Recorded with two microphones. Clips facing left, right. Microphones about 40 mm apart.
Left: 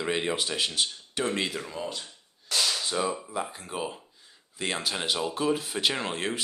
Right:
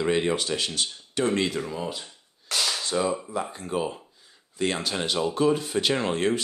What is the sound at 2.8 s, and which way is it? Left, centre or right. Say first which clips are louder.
Speech: right 3 dB; centre.